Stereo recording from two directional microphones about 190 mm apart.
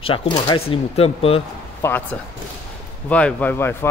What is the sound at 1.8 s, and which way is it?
Speech, 10° left (ahead or behind).